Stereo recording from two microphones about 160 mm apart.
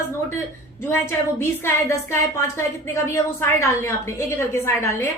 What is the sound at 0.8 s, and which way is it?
A woman's voice, 15° left (ahead or behind).